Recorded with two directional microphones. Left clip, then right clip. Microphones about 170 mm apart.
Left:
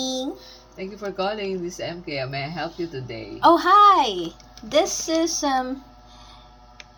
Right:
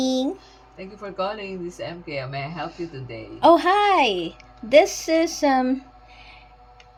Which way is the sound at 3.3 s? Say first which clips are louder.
Left 1 dB; 50° right (ahead or behind).